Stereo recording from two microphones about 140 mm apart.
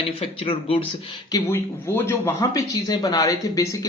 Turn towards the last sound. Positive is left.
turn(degrees=25)  # may be behind; listen again after turning